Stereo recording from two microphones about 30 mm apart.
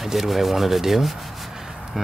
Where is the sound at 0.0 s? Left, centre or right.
Centre.